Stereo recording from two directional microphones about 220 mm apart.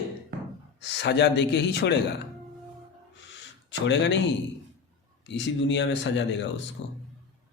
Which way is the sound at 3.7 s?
55° left (ahead or behind).